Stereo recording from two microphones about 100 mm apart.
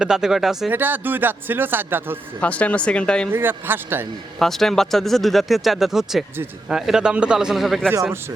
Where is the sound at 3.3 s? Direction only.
20° right (ahead or behind).